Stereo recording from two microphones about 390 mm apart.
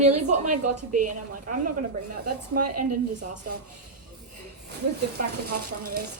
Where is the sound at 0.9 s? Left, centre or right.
Right.